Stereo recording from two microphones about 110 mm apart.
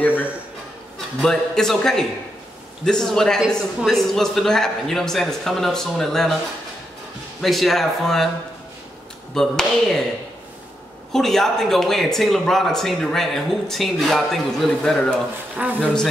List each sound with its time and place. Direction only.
0.0 s a sound: 15° left (ahead or behind)
1.2 s speech: 5° left (ahead or behind)
7.4 s speech: centre (ahead or behind)
9.3 s speech: 5° left (ahead or behind)
11.1 s speech: 5° left (ahead or behind)
15.5 s speech: 15° right (ahead or behind)
15.8 s speech: 5° left (ahead or behind)